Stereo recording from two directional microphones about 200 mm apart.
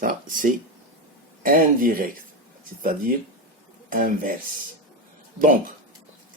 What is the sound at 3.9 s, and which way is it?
Speech, 45° right (ahead or behind).